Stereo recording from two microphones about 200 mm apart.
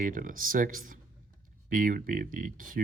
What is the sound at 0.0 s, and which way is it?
Speech, 45° right (ahead or behind).